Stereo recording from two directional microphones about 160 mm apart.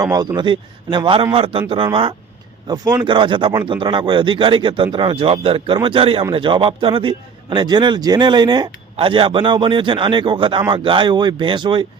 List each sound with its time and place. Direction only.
0.0 s a man's voice: 20° right (ahead or behind)